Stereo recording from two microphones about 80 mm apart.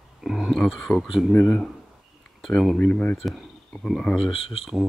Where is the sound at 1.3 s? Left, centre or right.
Centre.